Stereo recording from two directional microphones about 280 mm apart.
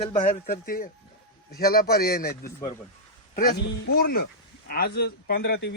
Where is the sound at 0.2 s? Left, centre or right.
Left.